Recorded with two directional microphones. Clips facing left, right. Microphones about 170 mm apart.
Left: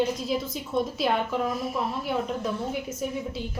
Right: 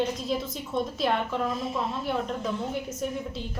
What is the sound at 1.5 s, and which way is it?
Speech, 25° right (ahead or behind).